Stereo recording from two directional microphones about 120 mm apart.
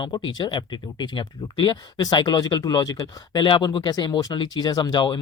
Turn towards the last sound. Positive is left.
turn(degrees=35)  # may be behind; listen again after turning